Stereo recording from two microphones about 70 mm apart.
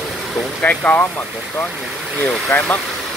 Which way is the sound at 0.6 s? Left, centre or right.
Left.